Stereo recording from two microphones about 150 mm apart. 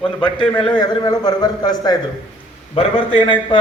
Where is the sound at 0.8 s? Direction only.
25° left (ahead or behind).